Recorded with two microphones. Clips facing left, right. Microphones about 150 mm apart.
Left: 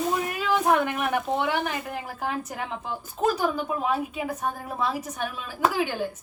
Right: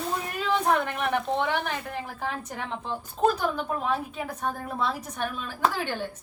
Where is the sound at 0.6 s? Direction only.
5° left (ahead or behind).